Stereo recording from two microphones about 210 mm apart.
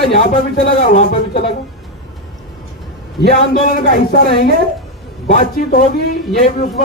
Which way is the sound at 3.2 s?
50° left (ahead or behind).